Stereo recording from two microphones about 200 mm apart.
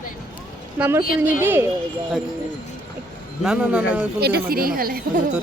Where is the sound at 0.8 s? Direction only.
5° right (ahead or behind).